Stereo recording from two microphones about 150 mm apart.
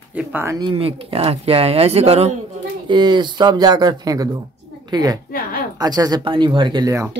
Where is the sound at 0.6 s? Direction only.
35° right (ahead or behind).